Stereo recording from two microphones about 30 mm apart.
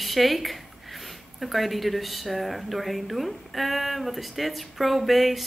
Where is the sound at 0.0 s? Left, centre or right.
Centre.